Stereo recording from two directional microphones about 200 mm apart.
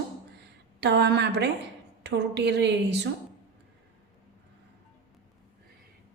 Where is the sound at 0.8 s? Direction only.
55° right (ahead or behind).